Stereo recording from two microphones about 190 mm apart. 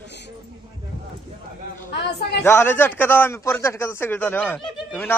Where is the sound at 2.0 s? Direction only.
60° left (ahead or behind).